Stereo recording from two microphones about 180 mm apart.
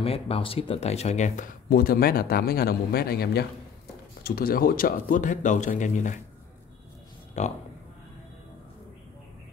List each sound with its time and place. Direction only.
0.0 s speech: 35° left (ahead or behind)
7.4 s speech: 40° left (ahead or behind)